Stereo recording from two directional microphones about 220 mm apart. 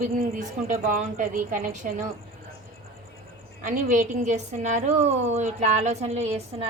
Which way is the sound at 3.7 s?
40° right (ahead or behind).